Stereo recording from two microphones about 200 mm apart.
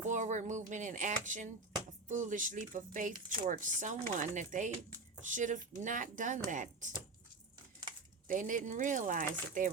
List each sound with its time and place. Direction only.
0.0 s speech: 40° right (ahead or behind)
8.3 s speech: 40° right (ahead or behind)